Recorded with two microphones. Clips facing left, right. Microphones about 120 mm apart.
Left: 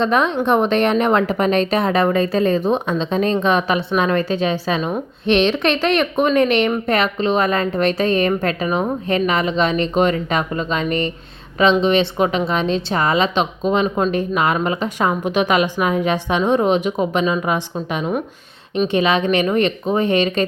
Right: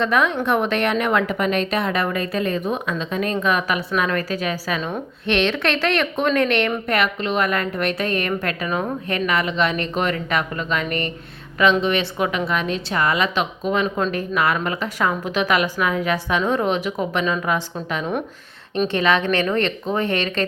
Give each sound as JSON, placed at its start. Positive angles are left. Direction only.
{"t": 0.0, "sound": "speech", "side_deg": 25}